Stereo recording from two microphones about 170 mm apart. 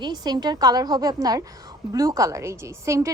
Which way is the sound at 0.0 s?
25° right (ahead or behind).